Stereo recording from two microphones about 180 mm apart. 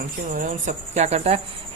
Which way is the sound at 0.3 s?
45° right (ahead or behind).